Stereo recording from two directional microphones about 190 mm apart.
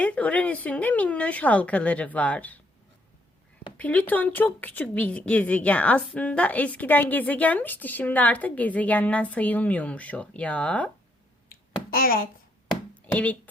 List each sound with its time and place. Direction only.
0.0 s speech: 5° left (ahead or behind)
3.8 s speech: 10° left (ahead or behind)
11.9 s speech: 50° left (ahead or behind)
12.9 s a sound: 10° left (ahead or behind)